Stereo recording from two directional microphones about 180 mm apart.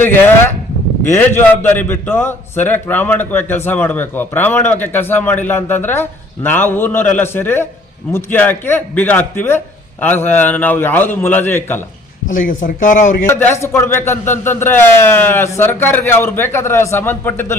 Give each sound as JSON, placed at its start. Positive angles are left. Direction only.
{"t": 0.0, "sound": "a man's voice", "side_deg": 10}
{"t": 12.3, "sound": "speech", "side_deg": 50}
{"t": 13.2, "sound": "a man's voice", "side_deg": 15}